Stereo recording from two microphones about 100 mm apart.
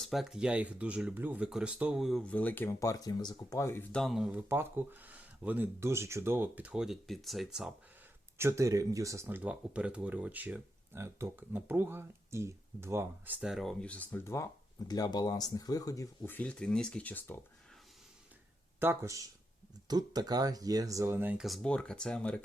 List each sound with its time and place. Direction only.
0.0 s speech: centre (ahead or behind)
2.2 s speech: 15° left (ahead or behind)
2.8 s speech: 35° left (ahead or behind)
3.9 s speech: centre (ahead or behind)
4.3 s speech: 20° right (ahead or behind); by 7.7 s centre (ahead or behind)
8.4 s speech: 30° right (ahead or behind)
13.4 s speech: 5° right (ahead or behind)
13.8 s speech: 15° left (ahead or behind)
14.3 s speech: 30° left (ahead or behind)
14.8 s speech: 40° left (ahead or behind)
16.2 s speech: 15° left (ahead or behind)
18.8 s speech: 25° right (ahead or behind)
19.9 s speech: 40° right (ahead or behind); by 21.3 s 25° right (ahead or behind)
21.3 s speech: centre (ahead or behind)